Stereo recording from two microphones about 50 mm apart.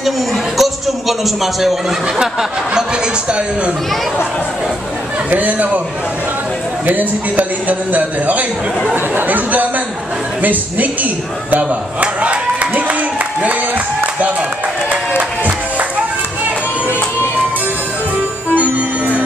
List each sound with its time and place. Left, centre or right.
0.6 s a man's voice: centre
3.3 s a man's voice: right
5.3 s a man's voice: right
6.9 s a man's voice: right
11.5 s a sound: right
14.9 s a sound: right
18.5 s music: right